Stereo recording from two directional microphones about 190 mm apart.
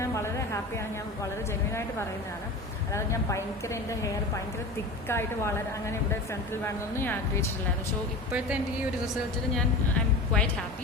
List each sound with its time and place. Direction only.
0.0 s a sound: 15° left (ahead or behind)
2.9 s a woman's voice: 15° left (ahead or behind)
9.6 s a woman's voice: 5° left (ahead or behind)